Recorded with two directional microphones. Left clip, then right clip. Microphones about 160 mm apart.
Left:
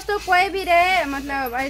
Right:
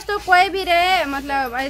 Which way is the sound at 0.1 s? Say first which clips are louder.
Right 3 dB; 5° left (ahead or behind).